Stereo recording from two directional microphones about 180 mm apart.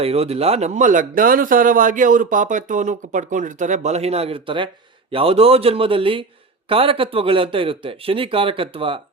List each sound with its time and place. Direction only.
0.0 s a man's voice: 35° right (ahead or behind)